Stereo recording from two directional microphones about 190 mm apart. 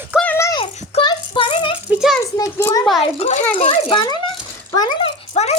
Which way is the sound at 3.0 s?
35° left (ahead or behind).